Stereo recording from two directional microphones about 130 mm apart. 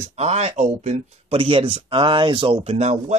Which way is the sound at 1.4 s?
40° right (ahead or behind).